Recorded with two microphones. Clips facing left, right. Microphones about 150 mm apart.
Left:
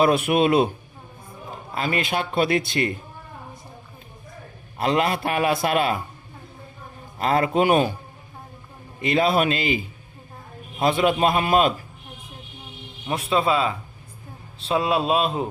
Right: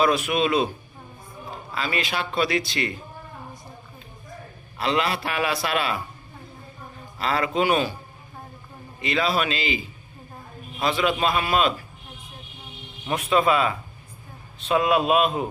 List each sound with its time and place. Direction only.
0.0 s a man's voice: 55° left (ahead or behind)
1.7 s a man's voice: 50° left (ahead or behind)
4.8 s a man's voice: 45° left (ahead or behind)
7.2 s a man's voice: 50° left (ahead or behind)
9.0 s a man's voice: 50° left (ahead or behind)
10.8 s a man's voice: 50° left (ahead or behind)
13.1 s a man's voice: 30° left (ahead or behind)